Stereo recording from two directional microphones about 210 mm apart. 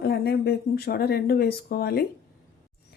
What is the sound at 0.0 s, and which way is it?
Speech, 50° left (ahead or behind).